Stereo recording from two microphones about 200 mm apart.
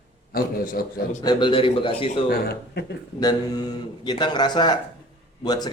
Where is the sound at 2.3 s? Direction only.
55° left (ahead or behind).